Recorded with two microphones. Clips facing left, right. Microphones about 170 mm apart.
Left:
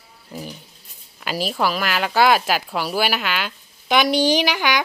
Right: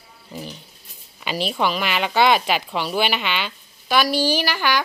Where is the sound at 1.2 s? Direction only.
5° left (ahead or behind).